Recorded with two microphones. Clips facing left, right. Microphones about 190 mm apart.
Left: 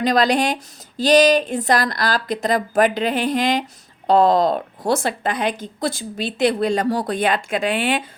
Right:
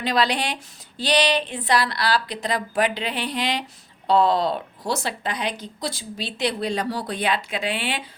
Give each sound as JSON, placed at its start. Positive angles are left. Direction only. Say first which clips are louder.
{"t": 0.0, "sound": "a woman's voice", "louder": "left 6 dB", "side_deg": 45}